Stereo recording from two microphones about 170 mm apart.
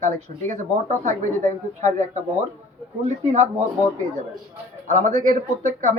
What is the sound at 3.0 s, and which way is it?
Speech, 45° right (ahead or behind).